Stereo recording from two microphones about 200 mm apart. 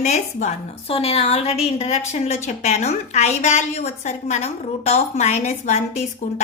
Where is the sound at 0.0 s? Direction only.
35° left (ahead or behind).